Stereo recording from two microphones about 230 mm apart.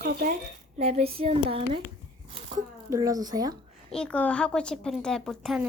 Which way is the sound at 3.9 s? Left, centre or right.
Centre.